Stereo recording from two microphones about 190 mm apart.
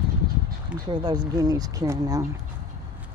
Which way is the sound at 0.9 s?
20° right (ahead or behind).